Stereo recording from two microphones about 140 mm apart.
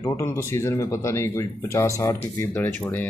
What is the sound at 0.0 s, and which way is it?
Speech, 20° left (ahead or behind).